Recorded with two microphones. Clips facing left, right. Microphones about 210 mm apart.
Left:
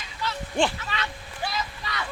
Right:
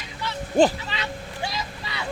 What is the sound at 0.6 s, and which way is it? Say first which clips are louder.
Speech: right 7 dB; 40° right (ahead or behind).